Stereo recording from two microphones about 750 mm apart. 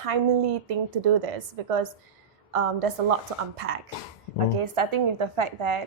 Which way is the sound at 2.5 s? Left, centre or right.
Right.